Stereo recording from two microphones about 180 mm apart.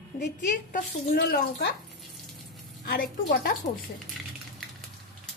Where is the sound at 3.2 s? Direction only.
65° left (ahead or behind).